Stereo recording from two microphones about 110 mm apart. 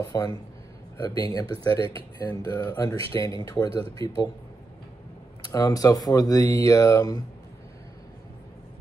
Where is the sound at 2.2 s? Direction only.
35° left (ahead or behind).